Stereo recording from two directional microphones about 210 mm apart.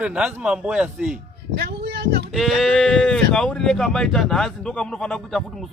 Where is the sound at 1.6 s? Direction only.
50° right (ahead or behind).